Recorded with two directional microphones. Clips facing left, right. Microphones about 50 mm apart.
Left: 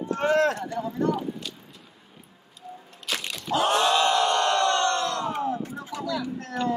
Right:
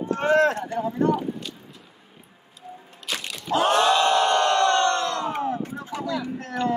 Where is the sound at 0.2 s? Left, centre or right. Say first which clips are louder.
Right 2 dB; right.